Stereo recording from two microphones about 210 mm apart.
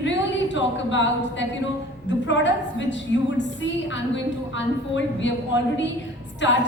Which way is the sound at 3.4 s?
60° left (ahead or behind).